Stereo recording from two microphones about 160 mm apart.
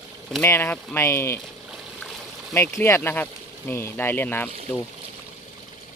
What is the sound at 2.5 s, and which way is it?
Speech, 15° left (ahead or behind).